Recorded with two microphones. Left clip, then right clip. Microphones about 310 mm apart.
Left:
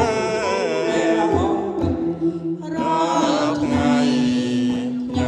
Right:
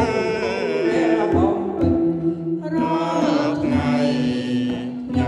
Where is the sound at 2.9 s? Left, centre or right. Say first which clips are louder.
Left 3 dB; left.